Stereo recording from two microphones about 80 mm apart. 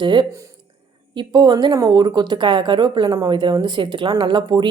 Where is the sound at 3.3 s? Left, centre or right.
Right.